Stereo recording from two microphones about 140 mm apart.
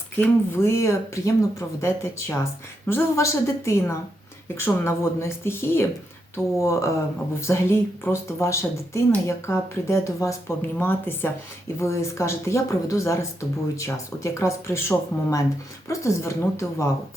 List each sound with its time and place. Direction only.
0.2 s speech: 20° left (ahead or behind)